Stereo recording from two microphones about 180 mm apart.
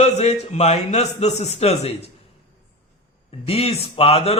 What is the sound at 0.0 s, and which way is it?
A man's voice, 35° left (ahead or behind).